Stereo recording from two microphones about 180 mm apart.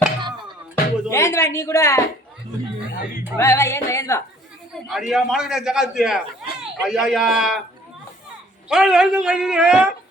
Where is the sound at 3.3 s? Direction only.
15° left (ahead or behind).